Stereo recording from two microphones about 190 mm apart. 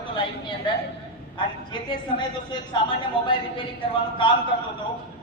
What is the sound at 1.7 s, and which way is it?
A woman's voice, 25° left (ahead or behind).